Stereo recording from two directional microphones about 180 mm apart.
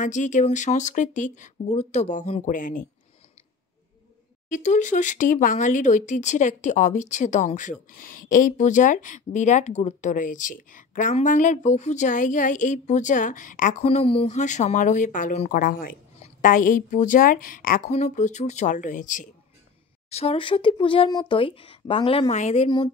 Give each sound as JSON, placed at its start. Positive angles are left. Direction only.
{"t": 0.0, "sound": "speech", "side_deg": 45}
{"t": 4.5, "sound": "speech", "side_deg": 45}
{"t": 20.1, "sound": "speech", "side_deg": 35}